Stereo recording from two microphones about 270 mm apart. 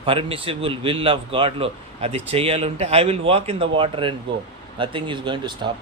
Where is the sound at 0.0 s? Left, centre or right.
Centre.